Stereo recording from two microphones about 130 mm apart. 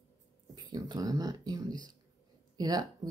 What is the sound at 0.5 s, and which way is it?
Speech, 30° right (ahead or behind).